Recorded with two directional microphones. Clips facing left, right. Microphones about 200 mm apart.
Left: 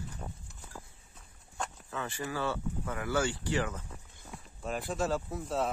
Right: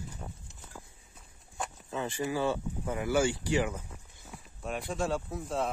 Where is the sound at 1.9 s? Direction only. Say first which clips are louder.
Right 6 dB; 20° right (ahead or behind).